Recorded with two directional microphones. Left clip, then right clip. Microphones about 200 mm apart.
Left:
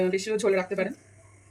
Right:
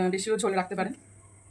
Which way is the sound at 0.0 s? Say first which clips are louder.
Left 2 dB; 50° right (ahead or behind).